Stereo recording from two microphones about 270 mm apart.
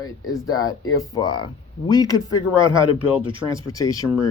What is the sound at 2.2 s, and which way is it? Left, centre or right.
Speech, centre.